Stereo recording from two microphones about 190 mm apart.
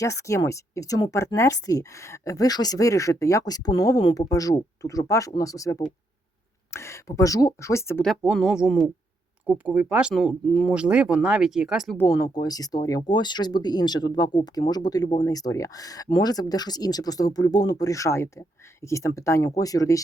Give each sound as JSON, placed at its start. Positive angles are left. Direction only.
{"t": 0.0, "sound": "a woman's voice", "side_deg": 15}
{"t": 8.0, "sound": "speech", "side_deg": 0}
{"t": 11.9, "sound": "speech", "side_deg": 15}